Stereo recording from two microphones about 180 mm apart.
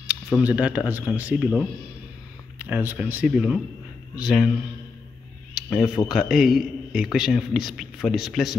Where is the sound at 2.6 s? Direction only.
10° right (ahead or behind).